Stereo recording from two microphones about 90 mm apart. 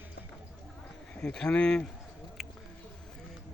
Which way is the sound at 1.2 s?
10° left (ahead or behind).